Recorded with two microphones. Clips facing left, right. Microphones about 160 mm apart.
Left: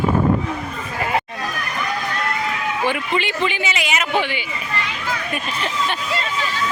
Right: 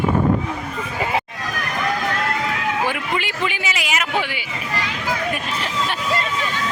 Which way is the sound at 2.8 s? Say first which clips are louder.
Left 2 dB; 5° right (ahead or behind).